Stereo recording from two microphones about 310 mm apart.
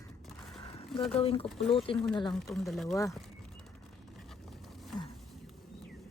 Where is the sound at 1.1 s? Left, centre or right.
Centre.